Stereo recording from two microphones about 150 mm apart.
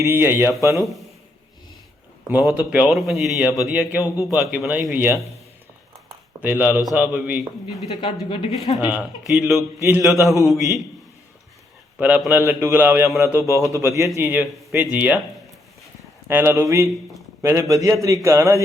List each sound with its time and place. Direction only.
0.0 s a man's voice: 15° right (ahead or behind)
2.3 s a man's voice: 10° right (ahead or behind)
6.4 s a man's voice: 10° right (ahead or behind)
8.0 s speech: 35° left (ahead or behind)
8.8 s a man's voice: 10° right (ahead or behind)
9.8 s a man's voice: 20° right (ahead or behind)
11.9 s a man's voice: 10° right (ahead or behind)
16.3 s a man's voice: 15° right (ahead or behind)